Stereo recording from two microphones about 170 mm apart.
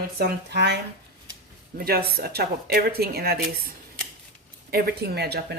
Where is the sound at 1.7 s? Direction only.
60° right (ahead or behind).